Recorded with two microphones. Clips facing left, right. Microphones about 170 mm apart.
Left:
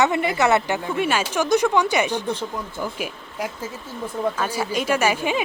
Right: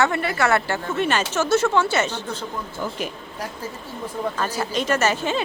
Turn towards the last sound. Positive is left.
turn(degrees=10)  # may be behind; listen again after turning